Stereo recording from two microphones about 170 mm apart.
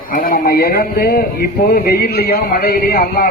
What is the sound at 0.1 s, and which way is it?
Speech, 55° left (ahead or behind).